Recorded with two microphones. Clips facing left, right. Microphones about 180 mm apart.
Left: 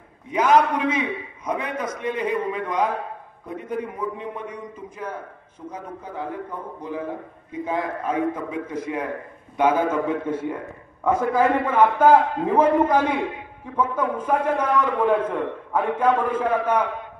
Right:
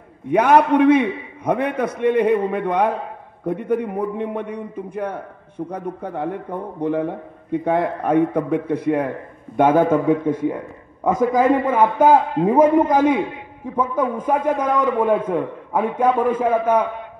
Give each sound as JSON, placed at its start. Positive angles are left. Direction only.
{"t": 0.3, "sound": "a man's voice", "side_deg": -60}
{"t": 11.1, "sound": "a man's voice", "side_deg": -15}